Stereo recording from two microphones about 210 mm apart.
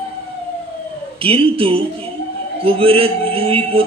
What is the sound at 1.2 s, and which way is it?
A man's voice, 25° right (ahead or behind).